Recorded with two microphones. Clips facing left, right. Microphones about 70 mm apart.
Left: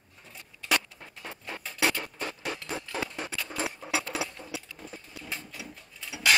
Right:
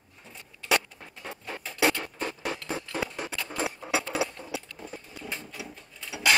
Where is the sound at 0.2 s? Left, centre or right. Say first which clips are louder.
Right 1 dB; centre.